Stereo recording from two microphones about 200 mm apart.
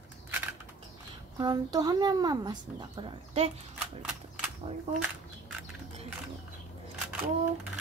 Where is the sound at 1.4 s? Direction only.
20° right (ahead or behind).